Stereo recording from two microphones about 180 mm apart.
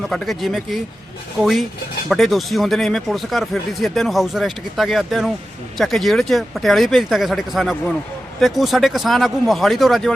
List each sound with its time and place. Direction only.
0.1 s speech: centre (ahead or behind)